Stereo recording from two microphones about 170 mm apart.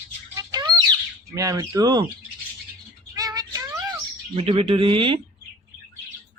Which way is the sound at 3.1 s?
20° right (ahead or behind).